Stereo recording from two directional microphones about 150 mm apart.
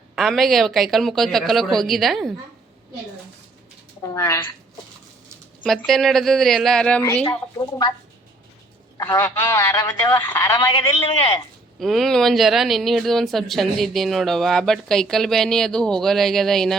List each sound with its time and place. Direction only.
0.2 s speech: centre (ahead or behind)
4.0 s a man's voice: 20° left (ahead or behind)
5.6 s speech: centre (ahead or behind)
7.0 s a woman's voice: 15° left (ahead or behind)
9.0 s a man's voice: 20° left (ahead or behind)
10.7 s speech: 30° left (ahead or behind)
11.8 s speech: centre (ahead or behind)